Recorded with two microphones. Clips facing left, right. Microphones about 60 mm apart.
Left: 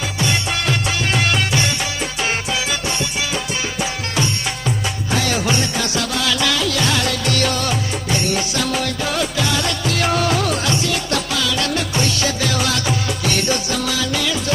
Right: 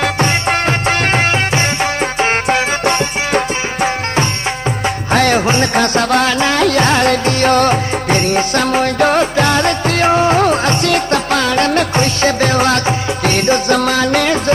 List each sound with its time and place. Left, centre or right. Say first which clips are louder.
0.0 s music: right 7 dB; right
5.4 s music: right 6 dB; right
5.8 s music: right 9 dB; right
6.3 s music: right 7 dB; right